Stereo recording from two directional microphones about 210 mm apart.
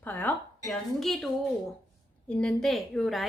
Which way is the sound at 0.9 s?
Centre (ahead or behind).